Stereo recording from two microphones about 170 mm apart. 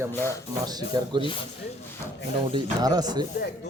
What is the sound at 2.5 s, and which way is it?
Speech, 25° right (ahead or behind).